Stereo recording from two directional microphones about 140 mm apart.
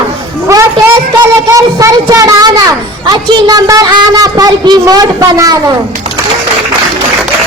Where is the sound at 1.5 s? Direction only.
25° right (ahead or behind).